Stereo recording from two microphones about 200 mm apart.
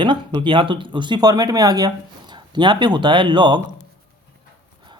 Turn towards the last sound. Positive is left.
turn(degrees=-25)  # may be behind; listen again after turning